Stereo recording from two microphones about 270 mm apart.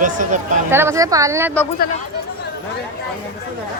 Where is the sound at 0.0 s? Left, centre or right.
Right.